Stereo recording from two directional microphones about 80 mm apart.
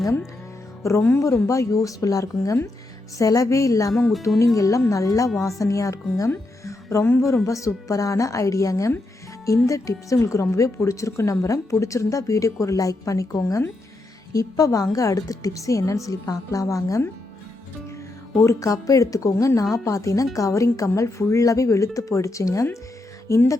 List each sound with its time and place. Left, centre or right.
0.8 s a woman's voice: left
18.4 s a woman's voice: left